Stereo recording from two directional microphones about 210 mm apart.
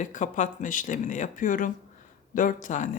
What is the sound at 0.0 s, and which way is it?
Speech, 35° left (ahead or behind).